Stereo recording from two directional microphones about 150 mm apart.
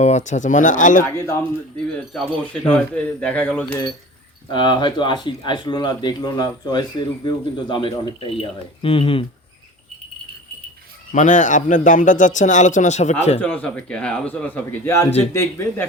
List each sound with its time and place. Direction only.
0.0 s a man's voice: 50° left (ahead or behind)
1.0 s speech: 15° left (ahead or behind)
4.4 s speech: 30° left (ahead or behind)
11.1 s a man's voice: 55° left (ahead or behind)
13.4 s speech: 10° left (ahead or behind)